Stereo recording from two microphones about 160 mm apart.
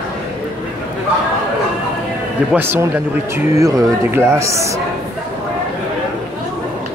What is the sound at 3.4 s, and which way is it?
Speech, 20° right (ahead or behind).